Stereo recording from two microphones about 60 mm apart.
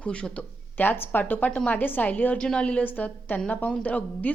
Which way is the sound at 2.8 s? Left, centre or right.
Left.